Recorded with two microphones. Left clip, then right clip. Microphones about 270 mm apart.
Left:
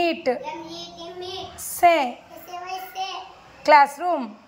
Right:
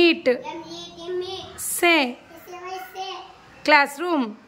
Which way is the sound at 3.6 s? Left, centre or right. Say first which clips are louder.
Left 2 dB; centre.